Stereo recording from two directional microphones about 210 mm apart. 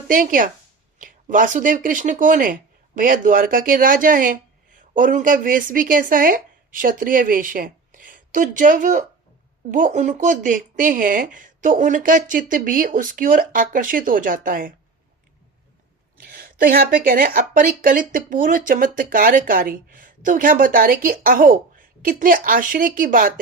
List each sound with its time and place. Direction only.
0.1 s speech: 40° right (ahead or behind)
16.1 s speech: 45° right (ahead or behind)